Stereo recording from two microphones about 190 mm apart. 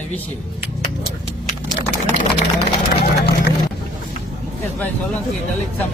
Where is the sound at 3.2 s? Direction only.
60° left (ahead or behind).